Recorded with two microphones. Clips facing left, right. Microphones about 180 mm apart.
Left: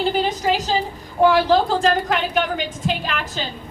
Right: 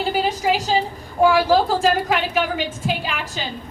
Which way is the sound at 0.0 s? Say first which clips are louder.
Left 1 dB; 5° right (ahead or behind).